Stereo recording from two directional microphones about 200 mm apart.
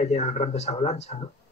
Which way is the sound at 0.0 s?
35° left (ahead or behind).